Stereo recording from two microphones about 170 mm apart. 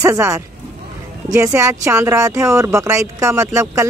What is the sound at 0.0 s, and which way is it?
Speech, 20° right (ahead or behind).